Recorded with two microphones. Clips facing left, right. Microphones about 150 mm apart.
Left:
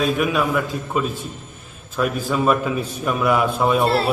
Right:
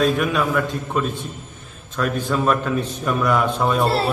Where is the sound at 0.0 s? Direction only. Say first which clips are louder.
Even; centre (ahead or behind).